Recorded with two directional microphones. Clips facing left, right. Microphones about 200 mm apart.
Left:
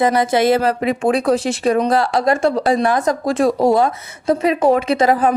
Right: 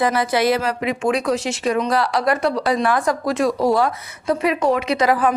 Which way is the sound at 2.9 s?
20° left (ahead or behind).